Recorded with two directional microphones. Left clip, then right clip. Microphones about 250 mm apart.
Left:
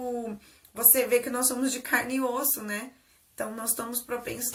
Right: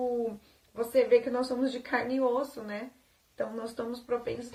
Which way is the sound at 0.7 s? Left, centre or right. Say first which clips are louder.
Right 1 dB; centre.